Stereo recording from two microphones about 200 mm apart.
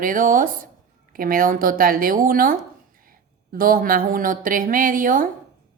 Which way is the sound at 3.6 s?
45° right (ahead or behind).